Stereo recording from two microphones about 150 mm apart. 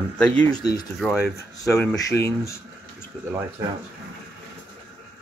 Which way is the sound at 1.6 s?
5° left (ahead or behind).